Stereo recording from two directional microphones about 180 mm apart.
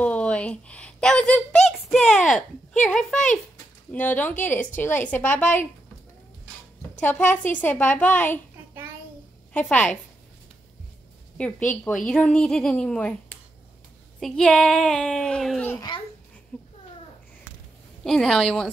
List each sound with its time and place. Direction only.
0.0 s a sound: 5° left (ahead or behind)
2.8 s a woman's voice: 5° left (ahead or behind)
7.0 s a woman's voice: 10° left (ahead or behind)
9.5 s a woman's voice: 10° left (ahead or behind)
11.3 s a woman's voice: 5° left (ahead or behind)
15.7 s a child's voice: 20° left (ahead or behind)
18.0 s a woman's voice: centre (ahead or behind)